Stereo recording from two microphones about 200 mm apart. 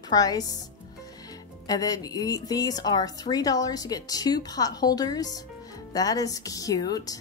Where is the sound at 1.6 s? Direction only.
20° left (ahead or behind).